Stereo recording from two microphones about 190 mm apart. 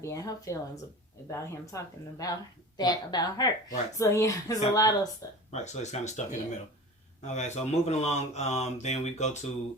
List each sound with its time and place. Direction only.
0.0 s speech: 15° left (ahead or behind)
5.5 s speech: 35° left (ahead or behind)
7.3 s speech: 35° left (ahead or behind)